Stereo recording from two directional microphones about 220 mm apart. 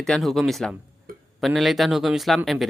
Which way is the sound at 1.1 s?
40° right (ahead or behind).